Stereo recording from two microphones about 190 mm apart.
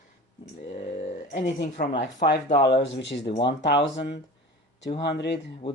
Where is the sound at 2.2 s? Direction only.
60° left (ahead or behind).